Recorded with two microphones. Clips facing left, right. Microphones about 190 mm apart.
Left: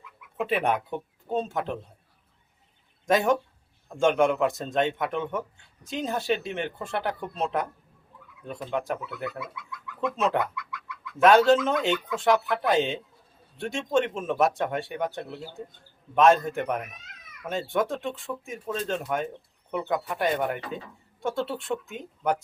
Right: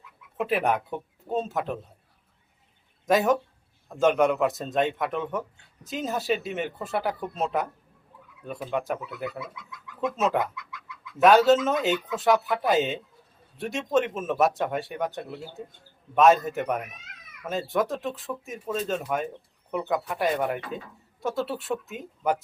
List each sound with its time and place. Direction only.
0.3 s speech: centre (ahead or behind)
3.1 s speech: centre (ahead or behind)
10.5 s bird: 20° right (ahead or behind)
11.2 s speech: centre (ahead or behind)